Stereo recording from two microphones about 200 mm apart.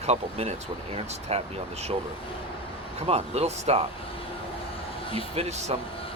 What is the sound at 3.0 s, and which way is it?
Speech, 30° right (ahead or behind).